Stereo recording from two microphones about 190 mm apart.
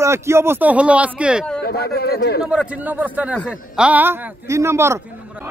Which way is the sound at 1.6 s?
55° left (ahead or behind).